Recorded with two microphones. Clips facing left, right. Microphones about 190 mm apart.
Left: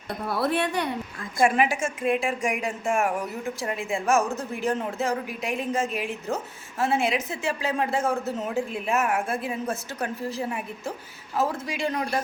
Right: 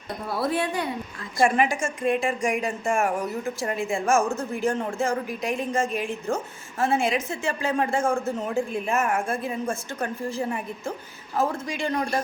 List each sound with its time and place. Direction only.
0.3 s a woman's voice: 65° left (ahead or behind)
1.4 s a woman's voice: 5° left (ahead or behind)